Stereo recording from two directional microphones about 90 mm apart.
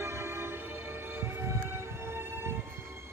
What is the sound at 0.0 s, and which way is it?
Music, 30° right (ahead or behind).